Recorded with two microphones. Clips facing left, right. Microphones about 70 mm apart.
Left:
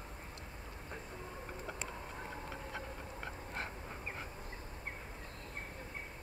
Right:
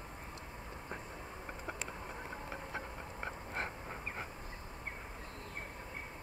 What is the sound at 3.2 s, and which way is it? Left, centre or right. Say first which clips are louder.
Dog: right 3 dB; right.